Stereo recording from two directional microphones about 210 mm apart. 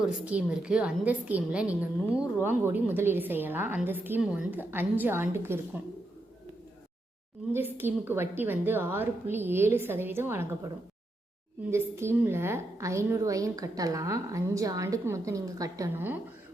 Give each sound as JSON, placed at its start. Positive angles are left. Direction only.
{"t": 0.0, "sound": "a woman's voice", "side_deg": -5}
{"t": 7.5, "sound": "a woman's voice", "side_deg": -10}
{"t": 11.7, "sound": "a woman's voice", "side_deg": -10}